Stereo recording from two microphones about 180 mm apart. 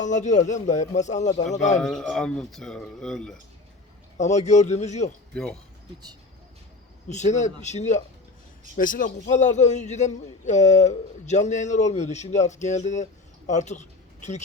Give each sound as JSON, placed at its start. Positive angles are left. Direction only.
{"t": 0.0, "sound": "a man's voice", "side_deg": 40}
{"t": 1.8, "sound": "speech", "side_deg": 5}
{"t": 4.2, "sound": "a man's voice", "side_deg": 40}
{"t": 5.3, "sound": "speech", "side_deg": 5}
{"t": 7.1, "sound": "a man's voice", "side_deg": 40}